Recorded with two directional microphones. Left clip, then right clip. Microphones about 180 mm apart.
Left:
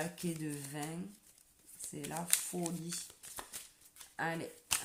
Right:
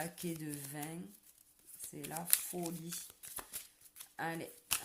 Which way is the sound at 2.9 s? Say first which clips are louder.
Left 3 dB; 20° right (ahead or behind).